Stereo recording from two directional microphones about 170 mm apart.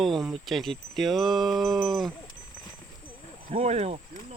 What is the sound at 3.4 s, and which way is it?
Speech, 35° right (ahead or behind).